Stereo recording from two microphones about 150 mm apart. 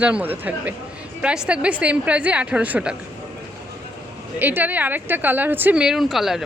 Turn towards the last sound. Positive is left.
turn(degrees=0)  # may be behind; listen again after turning